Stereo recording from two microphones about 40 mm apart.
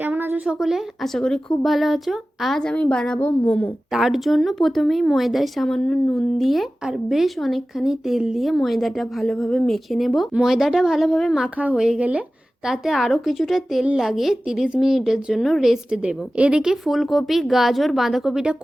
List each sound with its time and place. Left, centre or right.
0.0 s a sound: right
0.4 s a woman's voice: centre
1.0 s a woman's voice: centre
1.6 s speech: centre
2.7 s a woman's voice: left
3.9 s speech: centre
5.6 s a woman's voice: centre
6.4 s a woman's voice: centre
7.3 s speech: centre
7.8 s a woman's voice: centre
11.9 s speech: right
12.6 s a woman's voice: centre
15.9 s a woman's voice: right
16.8 s speech: centre